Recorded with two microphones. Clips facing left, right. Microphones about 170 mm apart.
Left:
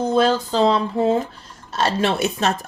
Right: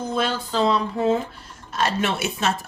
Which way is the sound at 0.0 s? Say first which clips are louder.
Left 7 dB; 30° left (ahead or behind).